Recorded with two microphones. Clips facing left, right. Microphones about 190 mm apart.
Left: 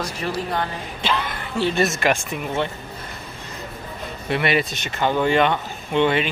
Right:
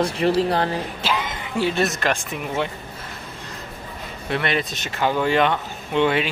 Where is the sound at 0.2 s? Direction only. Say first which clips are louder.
Right 5 dB; 30° right (ahead or behind).